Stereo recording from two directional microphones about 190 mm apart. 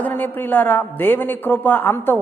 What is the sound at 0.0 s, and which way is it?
A man's voice, 10° left (ahead or behind).